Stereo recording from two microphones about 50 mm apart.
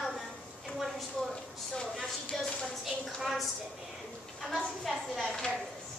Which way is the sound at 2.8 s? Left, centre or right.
Centre.